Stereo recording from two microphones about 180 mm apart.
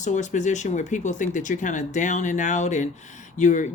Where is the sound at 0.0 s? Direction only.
40° left (ahead or behind).